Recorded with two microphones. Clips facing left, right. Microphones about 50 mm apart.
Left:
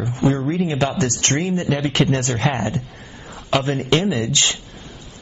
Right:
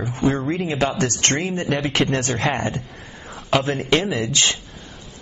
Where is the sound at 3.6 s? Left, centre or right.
Right.